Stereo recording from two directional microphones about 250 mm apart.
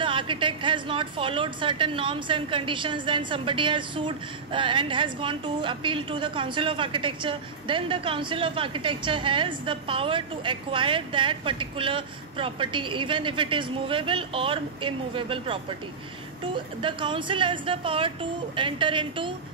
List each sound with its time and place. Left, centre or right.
0.0 s a woman's voice: centre